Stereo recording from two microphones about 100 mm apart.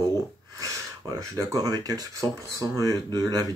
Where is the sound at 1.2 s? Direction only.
35° right (ahead or behind).